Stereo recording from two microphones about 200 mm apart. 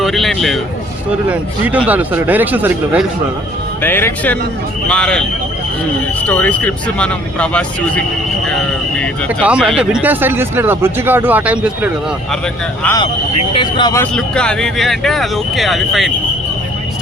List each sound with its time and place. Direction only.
0.0 s speech: centre (ahead or behind)
3.8 s speech: 10° left (ahead or behind)
6.2 s speech: 5° left (ahead or behind)
9.4 s speech: 5° right (ahead or behind)
13.0 s speech: 25° left (ahead or behind)
14.0 s speech: 5° left (ahead or behind)